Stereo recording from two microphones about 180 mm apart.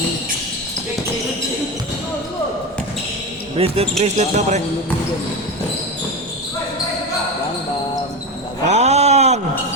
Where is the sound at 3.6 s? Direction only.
35° right (ahead or behind).